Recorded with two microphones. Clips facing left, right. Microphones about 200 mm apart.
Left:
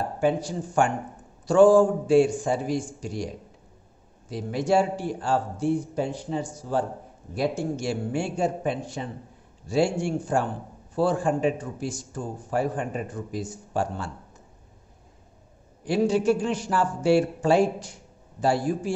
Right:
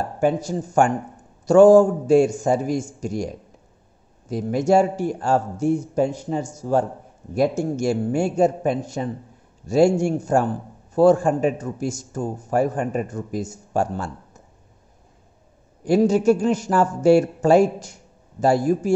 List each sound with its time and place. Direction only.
0.2 s a man's voice: 45° right (ahead or behind)
4.3 s a man's voice: 45° right (ahead or behind)
15.8 s a man's voice: 45° right (ahead or behind)